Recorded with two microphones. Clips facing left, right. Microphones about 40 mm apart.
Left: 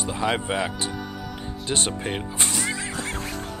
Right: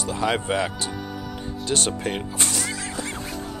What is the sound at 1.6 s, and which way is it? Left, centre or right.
Speech, left.